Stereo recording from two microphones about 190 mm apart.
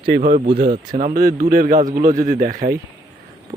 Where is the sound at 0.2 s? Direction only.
40° right (ahead or behind).